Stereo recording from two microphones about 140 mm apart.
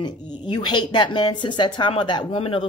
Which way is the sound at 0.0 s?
30° left (ahead or behind).